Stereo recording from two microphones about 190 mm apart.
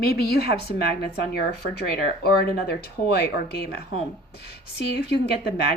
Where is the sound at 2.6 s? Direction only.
60° left (ahead or behind).